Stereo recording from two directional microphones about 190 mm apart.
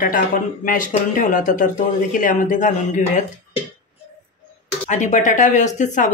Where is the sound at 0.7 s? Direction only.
45° left (ahead or behind).